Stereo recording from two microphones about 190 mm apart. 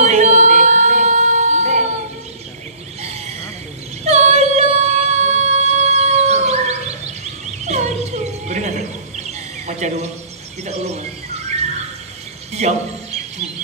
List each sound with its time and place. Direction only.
0.0 s music: 40° right (ahead or behind)
3.0 s a sound: 35° right (ahead or behind)
4.0 s music: 35° right (ahead or behind)
10.6 s bird: 35° right (ahead or behind)